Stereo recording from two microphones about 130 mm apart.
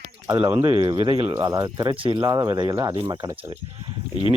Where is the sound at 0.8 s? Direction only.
45° right (ahead or behind).